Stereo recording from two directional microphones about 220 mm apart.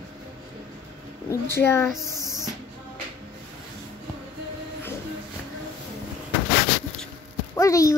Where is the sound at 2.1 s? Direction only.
15° right (ahead or behind).